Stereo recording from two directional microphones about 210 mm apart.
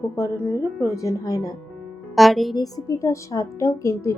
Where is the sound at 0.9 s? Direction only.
15° left (ahead or behind).